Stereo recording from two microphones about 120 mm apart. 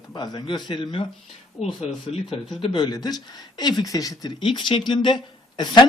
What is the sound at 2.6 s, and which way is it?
Speech, 45° left (ahead or behind).